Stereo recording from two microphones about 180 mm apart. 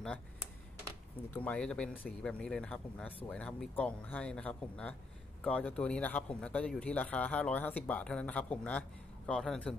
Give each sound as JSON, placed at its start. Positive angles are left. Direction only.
{"t": 1.3, "sound": "speech", "side_deg": 10}